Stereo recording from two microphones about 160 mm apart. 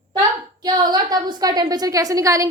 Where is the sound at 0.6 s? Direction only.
25° right (ahead or behind).